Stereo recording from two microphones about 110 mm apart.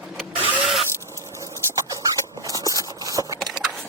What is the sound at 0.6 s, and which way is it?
Vehicle, centre (ahead or behind).